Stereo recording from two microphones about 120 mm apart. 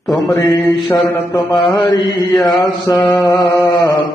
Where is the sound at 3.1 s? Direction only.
30° left (ahead or behind).